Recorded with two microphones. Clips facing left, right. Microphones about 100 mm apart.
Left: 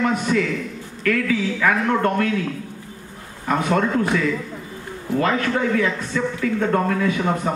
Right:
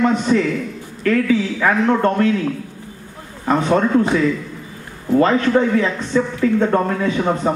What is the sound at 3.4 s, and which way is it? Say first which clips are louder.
Speech: right 4 dB; 30° right (ahead or behind).